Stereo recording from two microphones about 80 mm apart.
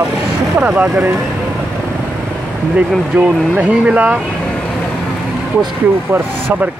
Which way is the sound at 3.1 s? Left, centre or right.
Right.